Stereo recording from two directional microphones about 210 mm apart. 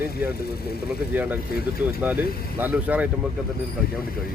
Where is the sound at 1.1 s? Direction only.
10° right (ahead or behind).